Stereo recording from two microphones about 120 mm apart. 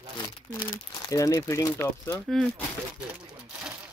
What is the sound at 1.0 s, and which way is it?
Speech, 30° left (ahead or behind).